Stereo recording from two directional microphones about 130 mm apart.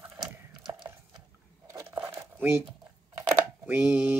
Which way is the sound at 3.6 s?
15° right (ahead or behind).